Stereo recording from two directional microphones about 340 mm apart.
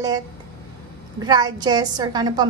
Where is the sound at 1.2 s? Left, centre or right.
Centre.